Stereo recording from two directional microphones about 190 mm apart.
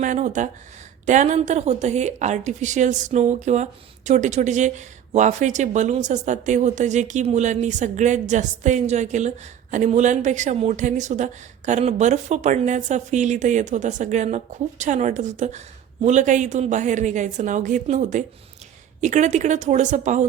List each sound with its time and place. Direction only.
0.0 s a woman's voice: 40° right (ahead or behind)